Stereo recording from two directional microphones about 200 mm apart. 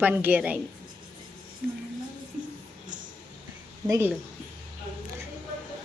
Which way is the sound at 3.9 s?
10° right (ahead or behind).